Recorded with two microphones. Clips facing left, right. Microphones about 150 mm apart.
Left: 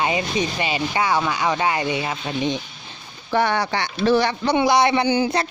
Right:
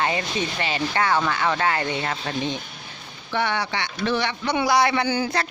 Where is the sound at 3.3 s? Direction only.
40° left (ahead or behind); by 5.4 s 20° left (ahead or behind).